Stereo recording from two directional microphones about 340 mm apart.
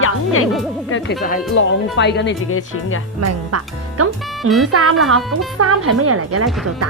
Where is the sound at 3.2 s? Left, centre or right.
Right.